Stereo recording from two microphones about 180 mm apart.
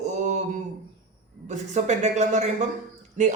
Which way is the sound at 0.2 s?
40° right (ahead or behind).